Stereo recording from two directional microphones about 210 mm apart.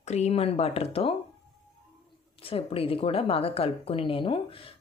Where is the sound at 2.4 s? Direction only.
25° left (ahead or behind).